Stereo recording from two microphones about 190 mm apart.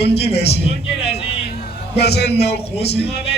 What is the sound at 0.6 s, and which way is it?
Speech, 30° left (ahead or behind).